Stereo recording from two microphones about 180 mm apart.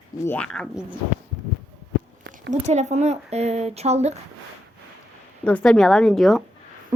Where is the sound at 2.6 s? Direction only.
40° right (ahead or behind).